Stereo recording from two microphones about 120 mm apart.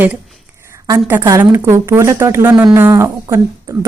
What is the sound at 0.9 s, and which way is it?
A woman's voice, 20° right (ahead or behind).